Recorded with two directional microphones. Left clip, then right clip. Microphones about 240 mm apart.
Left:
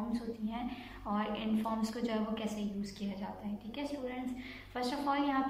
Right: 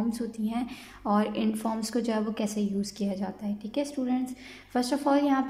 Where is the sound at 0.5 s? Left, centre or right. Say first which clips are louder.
Right 7 dB; right.